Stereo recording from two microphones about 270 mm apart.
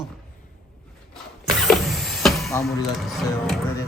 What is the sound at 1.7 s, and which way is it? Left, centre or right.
Vehicle, centre.